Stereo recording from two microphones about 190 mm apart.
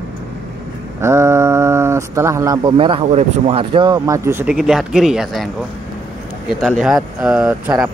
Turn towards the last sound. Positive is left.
turn(degrees=-5)  # may be behind; listen again after turning